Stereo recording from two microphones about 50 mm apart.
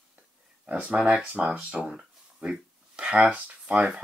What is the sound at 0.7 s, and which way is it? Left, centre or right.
Speech, right.